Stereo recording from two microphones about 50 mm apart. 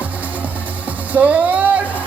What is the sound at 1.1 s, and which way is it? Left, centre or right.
Music, right.